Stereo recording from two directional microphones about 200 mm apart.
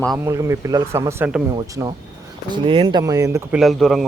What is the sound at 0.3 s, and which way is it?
Speech, 15° right (ahead or behind).